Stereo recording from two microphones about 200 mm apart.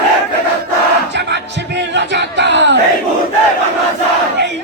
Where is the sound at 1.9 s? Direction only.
60° right (ahead or behind).